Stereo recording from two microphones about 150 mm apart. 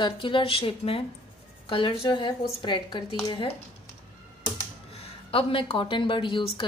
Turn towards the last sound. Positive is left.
turn(degrees=35)  # may be behind; listen again after turning